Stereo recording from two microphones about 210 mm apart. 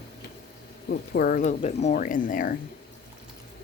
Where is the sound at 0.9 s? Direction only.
45° left (ahead or behind).